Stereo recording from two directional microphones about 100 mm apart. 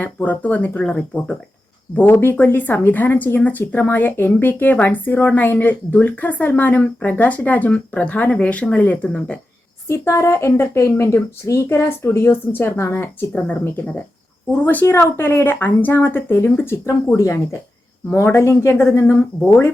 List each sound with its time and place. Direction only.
0.0 s speech: 15° left (ahead or behind)
9.8 s speech: 30° left (ahead or behind)